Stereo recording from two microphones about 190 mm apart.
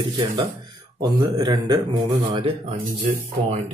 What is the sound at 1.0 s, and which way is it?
Speech, 20° right (ahead or behind).